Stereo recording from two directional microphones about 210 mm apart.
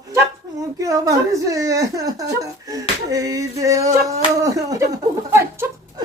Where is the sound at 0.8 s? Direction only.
15° right (ahead or behind).